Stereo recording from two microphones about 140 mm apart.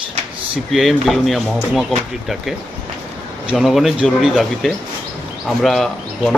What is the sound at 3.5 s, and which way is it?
Speech, centre (ahead or behind).